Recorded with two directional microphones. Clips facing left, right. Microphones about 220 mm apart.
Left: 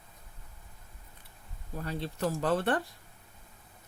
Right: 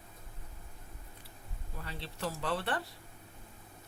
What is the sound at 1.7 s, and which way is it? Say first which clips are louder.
Speech: left 9 dB; 45° left (ahead or behind).